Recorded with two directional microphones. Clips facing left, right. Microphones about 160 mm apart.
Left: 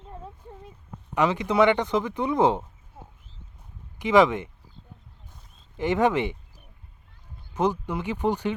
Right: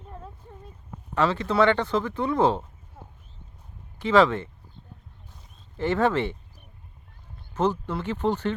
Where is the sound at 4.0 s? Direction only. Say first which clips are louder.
Left 1 dB; 15° left (ahead or behind).